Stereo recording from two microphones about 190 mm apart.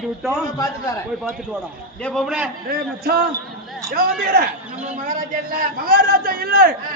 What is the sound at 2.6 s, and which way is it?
A man's voice, 50° right (ahead or behind).